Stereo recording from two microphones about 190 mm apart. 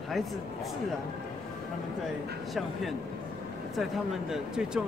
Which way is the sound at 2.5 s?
Centre (ahead or behind).